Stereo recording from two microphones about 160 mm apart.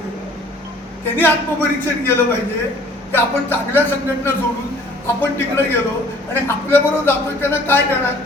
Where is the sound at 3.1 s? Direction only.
15° left (ahead or behind).